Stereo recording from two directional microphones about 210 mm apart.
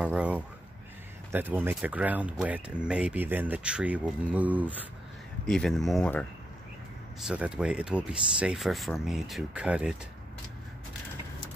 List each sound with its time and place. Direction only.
0.0 s speech: 5° right (ahead or behind)